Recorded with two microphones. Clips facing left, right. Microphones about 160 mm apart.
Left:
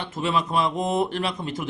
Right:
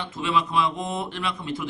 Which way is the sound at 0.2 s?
45° left (ahead or behind).